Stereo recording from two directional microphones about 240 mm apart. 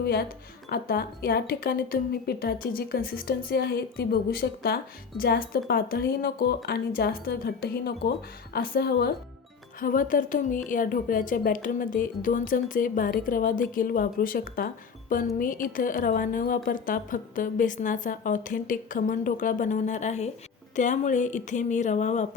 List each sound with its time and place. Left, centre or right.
0.0 s speech: left